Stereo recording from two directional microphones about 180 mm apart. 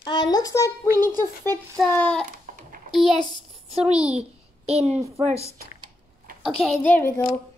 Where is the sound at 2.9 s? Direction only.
Centre (ahead or behind).